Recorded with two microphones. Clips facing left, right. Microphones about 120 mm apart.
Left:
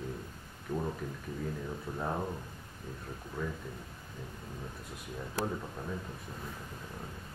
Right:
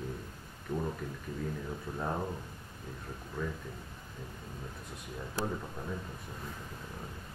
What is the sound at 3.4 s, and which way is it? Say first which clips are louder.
Speech: even; 5° left (ahead or behind).